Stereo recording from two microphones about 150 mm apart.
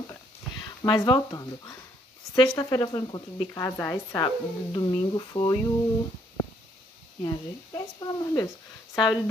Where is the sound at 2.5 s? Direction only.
25° left (ahead or behind).